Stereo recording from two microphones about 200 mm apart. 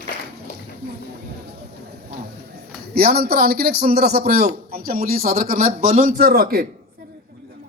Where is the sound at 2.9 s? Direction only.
50° right (ahead or behind).